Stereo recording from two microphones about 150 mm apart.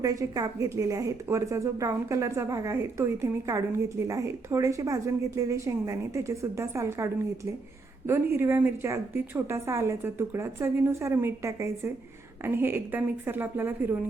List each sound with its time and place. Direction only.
0.0 s a woman's voice: 25° right (ahead or behind)